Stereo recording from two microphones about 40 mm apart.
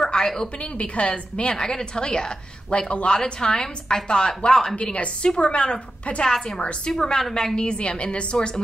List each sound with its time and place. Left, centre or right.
0.2 s a woman's voice: centre
0.6 s a woman's voice: left
1.6 s a woman's voice: centre
4.7 s a woman's voice: left
6.9 s a woman's voice: centre